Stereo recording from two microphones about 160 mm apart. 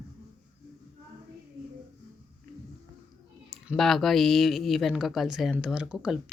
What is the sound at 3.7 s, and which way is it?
Speech, centre (ahead or behind).